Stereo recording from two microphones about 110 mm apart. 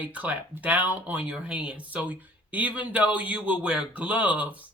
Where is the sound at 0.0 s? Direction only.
15° right (ahead or behind).